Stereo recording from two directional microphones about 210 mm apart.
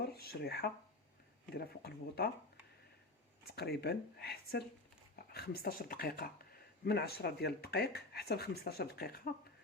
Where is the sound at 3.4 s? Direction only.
50° left (ahead or behind).